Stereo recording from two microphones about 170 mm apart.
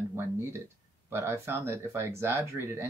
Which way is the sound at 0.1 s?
15° right (ahead or behind).